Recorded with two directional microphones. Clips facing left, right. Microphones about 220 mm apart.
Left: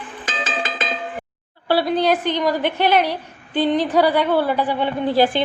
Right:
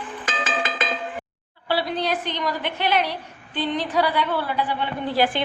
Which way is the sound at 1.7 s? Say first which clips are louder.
Left 6 dB; 40° left (ahead or behind).